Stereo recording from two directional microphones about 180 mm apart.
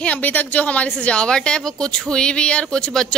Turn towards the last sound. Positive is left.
turn(degrees=5)  # may be behind; listen again after turning